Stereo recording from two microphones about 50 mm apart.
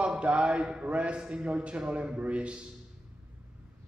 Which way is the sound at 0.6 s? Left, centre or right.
Centre.